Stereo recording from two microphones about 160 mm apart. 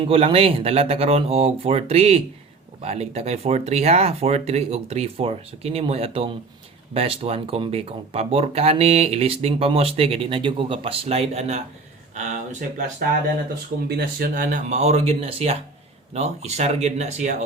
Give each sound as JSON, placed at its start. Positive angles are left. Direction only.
{"t": 0.0, "sound": "speech", "side_deg": -35}
{"t": 13.8, "sound": "speech", "side_deg": -75}